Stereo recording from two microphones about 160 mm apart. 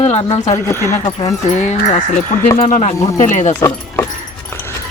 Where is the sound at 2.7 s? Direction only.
45° left (ahead or behind).